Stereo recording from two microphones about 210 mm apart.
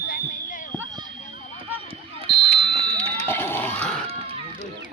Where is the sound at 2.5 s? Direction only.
25° right (ahead or behind).